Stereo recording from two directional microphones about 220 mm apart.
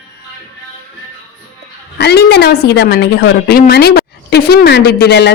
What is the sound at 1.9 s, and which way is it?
A woman's voice, 50° left (ahead or behind).